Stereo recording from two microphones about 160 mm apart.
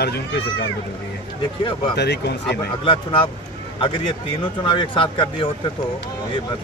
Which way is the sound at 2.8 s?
35° left (ahead or behind).